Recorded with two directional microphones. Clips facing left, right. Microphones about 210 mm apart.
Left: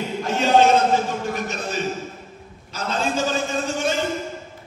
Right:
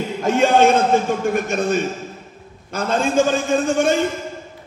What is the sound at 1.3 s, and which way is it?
Speech, 50° right (ahead or behind).